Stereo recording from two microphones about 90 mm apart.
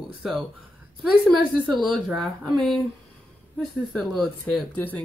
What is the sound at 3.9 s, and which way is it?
Speech, centre (ahead or behind).